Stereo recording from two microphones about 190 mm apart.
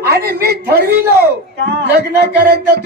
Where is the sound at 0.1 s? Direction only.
55° right (ahead or behind).